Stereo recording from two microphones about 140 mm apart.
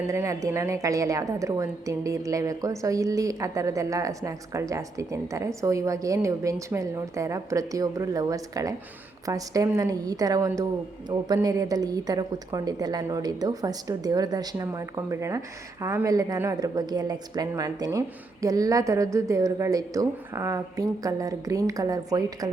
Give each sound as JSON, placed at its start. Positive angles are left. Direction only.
{"t": 0.1, "sound": "a woman's voice", "side_deg": -20}